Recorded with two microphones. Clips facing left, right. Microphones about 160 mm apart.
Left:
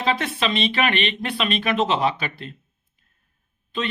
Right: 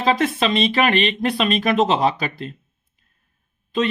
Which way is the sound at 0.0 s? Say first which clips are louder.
Right 4 dB; 40° right (ahead or behind).